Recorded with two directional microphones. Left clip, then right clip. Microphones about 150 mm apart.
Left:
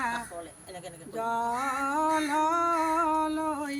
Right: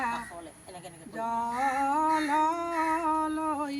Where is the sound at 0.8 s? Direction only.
15° right (ahead or behind).